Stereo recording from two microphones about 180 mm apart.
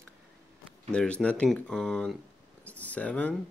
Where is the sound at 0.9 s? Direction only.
5° left (ahead or behind).